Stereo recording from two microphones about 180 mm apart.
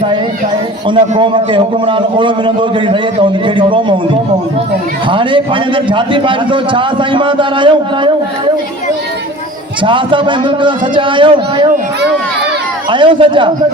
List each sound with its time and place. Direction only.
0.9 s a man's voice: 25° right (ahead or behind)
9.8 s a man's voice: 25° right (ahead or behind)
12.9 s a man's voice: 30° right (ahead or behind)